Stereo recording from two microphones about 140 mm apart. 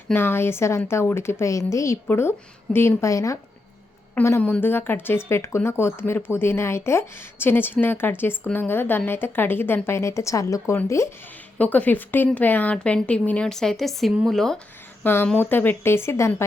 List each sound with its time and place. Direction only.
0.1 s a woman's voice: 15° left (ahead or behind)
15.0 s speech: 15° left (ahead or behind)